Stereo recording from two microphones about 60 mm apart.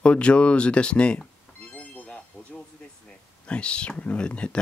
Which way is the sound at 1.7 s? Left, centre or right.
Left.